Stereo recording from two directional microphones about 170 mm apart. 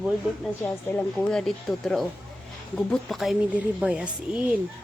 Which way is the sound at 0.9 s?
5° left (ahead or behind).